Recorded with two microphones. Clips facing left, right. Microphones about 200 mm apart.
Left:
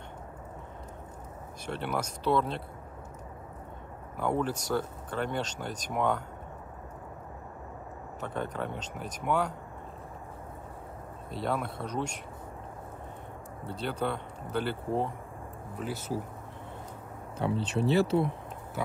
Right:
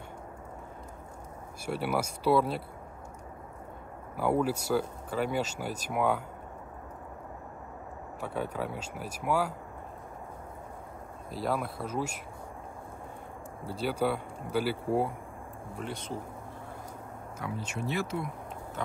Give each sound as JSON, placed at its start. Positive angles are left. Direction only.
{"t": 1.7, "sound": "speech", "side_deg": -10}
{"t": 4.2, "sound": "speech", "side_deg": -5}
{"t": 8.2, "sound": "speech", "side_deg": -10}
{"t": 11.2, "sound": "speech", "side_deg": 0}
{"t": 13.7, "sound": "speech", "side_deg": -10}
{"t": 15.7, "sound": "speech", "side_deg": 5}
{"t": 17.4, "sound": "speech", "side_deg": 30}